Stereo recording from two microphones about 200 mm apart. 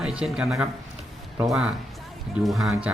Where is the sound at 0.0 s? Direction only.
5° right (ahead or behind).